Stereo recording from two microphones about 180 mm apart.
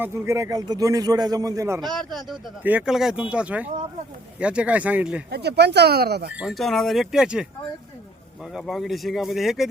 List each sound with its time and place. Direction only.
0.0 s a man's voice: 15° right (ahead or behind)
1.8 s speech: centre (ahead or behind)
5.3 s speech: 65° right (ahead or behind)
6.3 s speech: centre (ahead or behind)
8.5 s speech: centre (ahead or behind)